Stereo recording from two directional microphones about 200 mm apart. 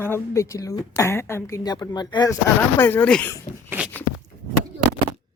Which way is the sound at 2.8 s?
10° left (ahead or behind).